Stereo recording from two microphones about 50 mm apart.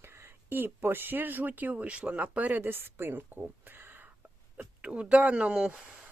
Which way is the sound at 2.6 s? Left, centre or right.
Right.